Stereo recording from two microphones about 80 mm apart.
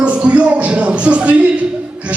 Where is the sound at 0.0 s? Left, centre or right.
Centre.